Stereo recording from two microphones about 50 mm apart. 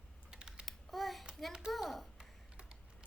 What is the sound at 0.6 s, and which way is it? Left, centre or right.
Babbling, centre.